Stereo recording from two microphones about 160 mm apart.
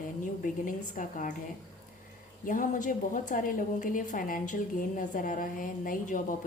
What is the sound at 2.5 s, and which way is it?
A woman's voice, 55° left (ahead or behind).